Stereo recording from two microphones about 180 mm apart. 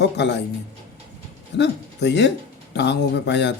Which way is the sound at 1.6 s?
75° left (ahead or behind).